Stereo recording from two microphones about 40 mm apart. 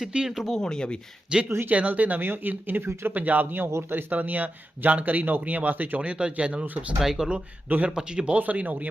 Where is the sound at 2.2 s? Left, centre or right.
Right.